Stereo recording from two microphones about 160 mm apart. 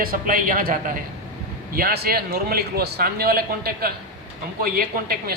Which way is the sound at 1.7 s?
75° right (ahead or behind).